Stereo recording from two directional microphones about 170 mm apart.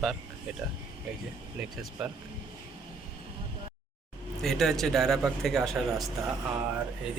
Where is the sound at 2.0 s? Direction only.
Centre (ahead or behind).